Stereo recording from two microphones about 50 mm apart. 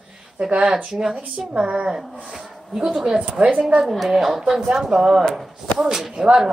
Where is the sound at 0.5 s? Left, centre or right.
Right.